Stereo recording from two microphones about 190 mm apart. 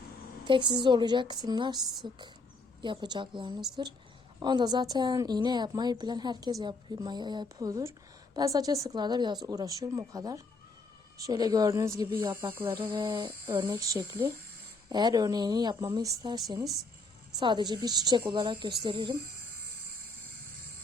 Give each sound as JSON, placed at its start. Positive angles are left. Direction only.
{"t": 0.4, "sound": "a woman's voice", "side_deg": -25}
{"t": 12.6, "sound": "a woman's voice", "side_deg": -30}